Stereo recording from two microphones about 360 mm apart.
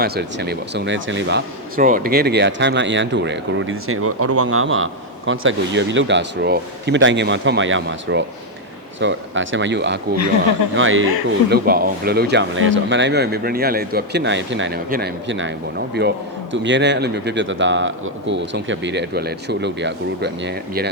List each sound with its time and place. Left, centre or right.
0.0 s speech: right